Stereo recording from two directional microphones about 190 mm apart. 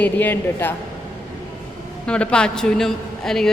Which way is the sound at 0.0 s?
10° left (ahead or behind).